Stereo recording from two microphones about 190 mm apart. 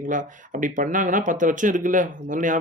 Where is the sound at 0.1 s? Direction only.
45° right (ahead or behind).